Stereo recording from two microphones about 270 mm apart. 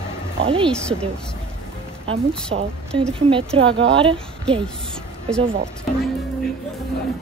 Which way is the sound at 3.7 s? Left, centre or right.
Right.